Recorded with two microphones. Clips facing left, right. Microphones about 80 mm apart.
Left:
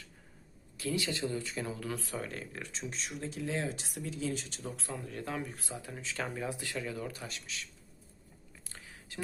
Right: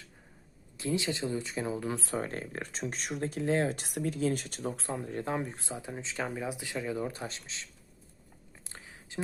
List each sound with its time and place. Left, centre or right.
0.8 s speech: right
2.1 s speech: right
6.2 s speech: centre; by 7.7 s right
8.6 s a sound: right